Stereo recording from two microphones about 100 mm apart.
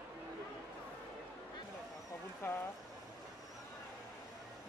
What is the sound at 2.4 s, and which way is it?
Speech, 25° left (ahead or behind).